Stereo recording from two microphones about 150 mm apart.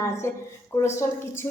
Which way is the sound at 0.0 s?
20° left (ahead or behind).